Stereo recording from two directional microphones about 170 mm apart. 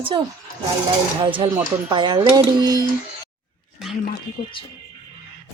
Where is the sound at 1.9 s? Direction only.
25° right (ahead or behind).